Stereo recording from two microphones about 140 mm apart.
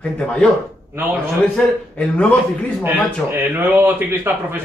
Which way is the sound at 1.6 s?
5° left (ahead or behind).